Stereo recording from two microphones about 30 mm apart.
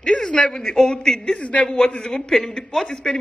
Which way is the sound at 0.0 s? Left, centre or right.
Left.